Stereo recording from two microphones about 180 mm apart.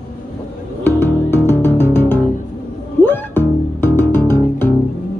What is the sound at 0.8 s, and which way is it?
Music, 15° left (ahead or behind).